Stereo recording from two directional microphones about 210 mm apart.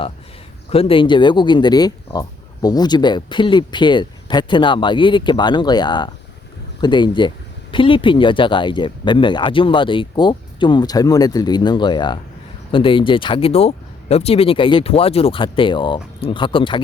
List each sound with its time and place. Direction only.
0.7 s speech: 25° left (ahead or behind)